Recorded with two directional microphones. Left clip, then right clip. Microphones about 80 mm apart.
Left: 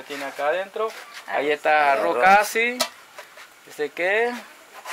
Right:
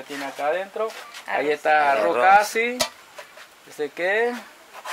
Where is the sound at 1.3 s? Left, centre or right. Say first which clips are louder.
Even; right.